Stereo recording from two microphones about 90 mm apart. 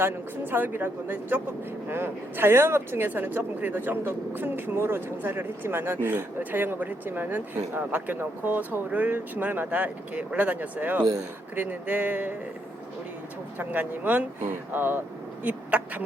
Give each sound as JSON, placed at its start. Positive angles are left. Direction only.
{"t": 0.0, "sound": "speech", "side_deg": -25}
{"t": 13.6, "sound": "speech", "side_deg": -20}